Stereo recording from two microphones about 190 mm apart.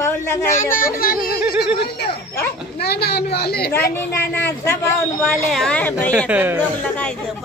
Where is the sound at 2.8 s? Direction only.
55° left (ahead or behind).